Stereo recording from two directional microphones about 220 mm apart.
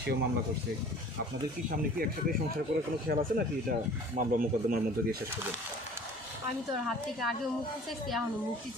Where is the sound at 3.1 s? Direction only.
45° right (ahead or behind).